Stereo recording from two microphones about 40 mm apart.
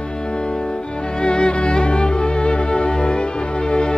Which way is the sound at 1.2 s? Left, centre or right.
Left.